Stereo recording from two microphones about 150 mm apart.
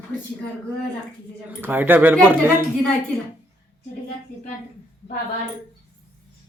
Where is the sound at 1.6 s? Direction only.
15° right (ahead or behind).